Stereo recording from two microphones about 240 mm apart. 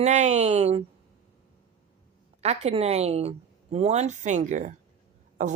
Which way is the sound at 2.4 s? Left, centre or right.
Right.